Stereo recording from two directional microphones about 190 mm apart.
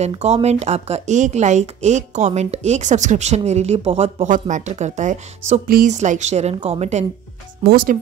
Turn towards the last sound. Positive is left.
turn(degrees=-35)  # may be behind; listen again after turning